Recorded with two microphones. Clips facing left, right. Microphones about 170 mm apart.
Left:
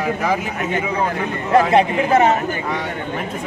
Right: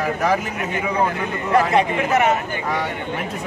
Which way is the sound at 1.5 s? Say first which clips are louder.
Left 3 dB; 30° left (ahead or behind).